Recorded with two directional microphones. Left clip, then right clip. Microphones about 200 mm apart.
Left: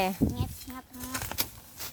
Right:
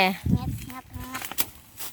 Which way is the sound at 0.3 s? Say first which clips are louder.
Right 4 dB; 40° right (ahead or behind).